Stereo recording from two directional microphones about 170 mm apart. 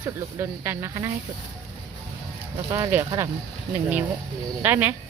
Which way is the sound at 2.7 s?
15° right (ahead or behind).